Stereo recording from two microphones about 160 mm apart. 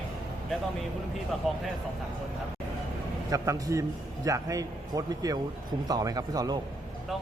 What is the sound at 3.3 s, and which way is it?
A man's voice, 20° right (ahead or behind).